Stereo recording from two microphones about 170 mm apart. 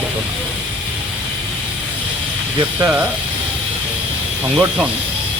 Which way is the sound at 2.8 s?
10° right (ahead or behind).